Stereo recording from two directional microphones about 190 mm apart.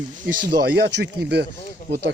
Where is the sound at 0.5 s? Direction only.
55° right (ahead or behind).